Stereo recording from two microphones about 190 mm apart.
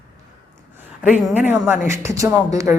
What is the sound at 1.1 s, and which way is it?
Speech, 10° right (ahead or behind).